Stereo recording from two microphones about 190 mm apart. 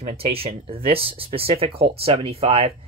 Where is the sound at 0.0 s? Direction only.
30° right (ahead or behind).